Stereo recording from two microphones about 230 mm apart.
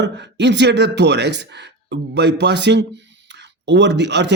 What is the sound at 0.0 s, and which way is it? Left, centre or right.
A man's voice, right.